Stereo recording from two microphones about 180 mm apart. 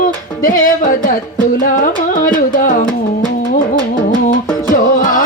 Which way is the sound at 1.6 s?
50° left (ahead or behind).